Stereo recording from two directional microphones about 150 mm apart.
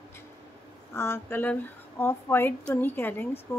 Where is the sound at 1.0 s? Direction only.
15° left (ahead or behind).